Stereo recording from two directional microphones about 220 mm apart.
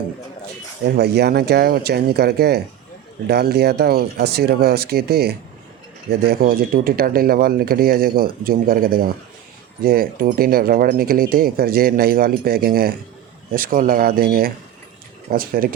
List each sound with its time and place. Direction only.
0.9 s speech: 50° right (ahead or behind)